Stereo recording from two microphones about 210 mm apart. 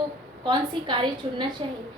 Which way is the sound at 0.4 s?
20° right (ahead or behind).